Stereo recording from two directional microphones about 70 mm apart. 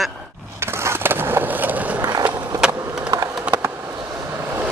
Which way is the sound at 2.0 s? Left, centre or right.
Right.